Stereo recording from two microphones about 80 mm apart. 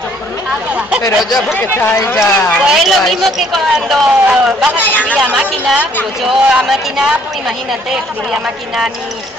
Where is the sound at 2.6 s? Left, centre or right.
Centre.